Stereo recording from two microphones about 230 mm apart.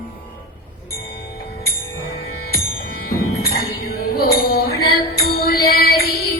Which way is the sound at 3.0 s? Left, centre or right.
Left.